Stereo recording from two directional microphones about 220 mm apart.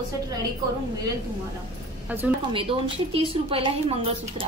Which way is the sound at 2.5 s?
25° right (ahead or behind).